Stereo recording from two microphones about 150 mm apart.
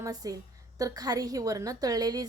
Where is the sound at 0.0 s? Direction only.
25° right (ahead or behind).